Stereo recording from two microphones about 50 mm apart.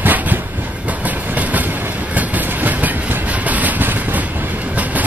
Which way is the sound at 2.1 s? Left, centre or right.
Right.